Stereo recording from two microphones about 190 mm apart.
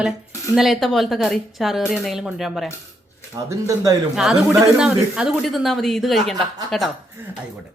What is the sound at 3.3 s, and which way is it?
Speech, 15° right (ahead or behind).